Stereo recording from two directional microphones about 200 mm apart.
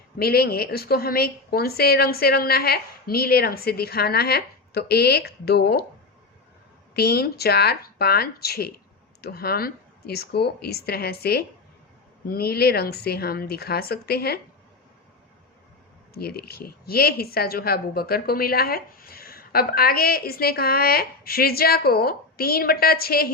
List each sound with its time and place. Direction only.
0.2 s a woman's voice: 50° left (ahead or behind)
6.9 s a woman's voice: 50° left (ahead or behind)
16.1 s a woman's voice: 50° left (ahead or behind)